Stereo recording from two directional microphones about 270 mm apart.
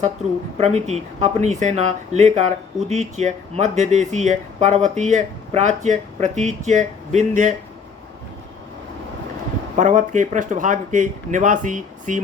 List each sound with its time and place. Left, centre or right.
0.6 s speech: right
9.7 s speech: right